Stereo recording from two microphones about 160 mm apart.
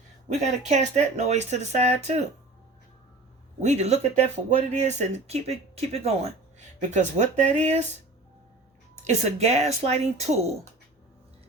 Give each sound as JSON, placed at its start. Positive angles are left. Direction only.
{"t": 0.3, "sound": "speech", "side_deg": -45}
{"t": 3.6, "sound": "speech", "side_deg": -45}
{"t": 9.0, "sound": "speech", "side_deg": -40}